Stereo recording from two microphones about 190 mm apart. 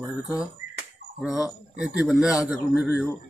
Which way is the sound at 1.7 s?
5° right (ahead or behind).